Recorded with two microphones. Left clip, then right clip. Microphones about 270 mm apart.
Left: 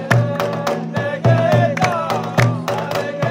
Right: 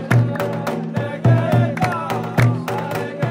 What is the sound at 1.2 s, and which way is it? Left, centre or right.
Music, left.